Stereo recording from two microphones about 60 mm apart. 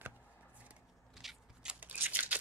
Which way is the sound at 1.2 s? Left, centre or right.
Centre.